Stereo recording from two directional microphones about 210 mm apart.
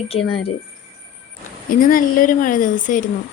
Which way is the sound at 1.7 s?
40° left (ahead or behind).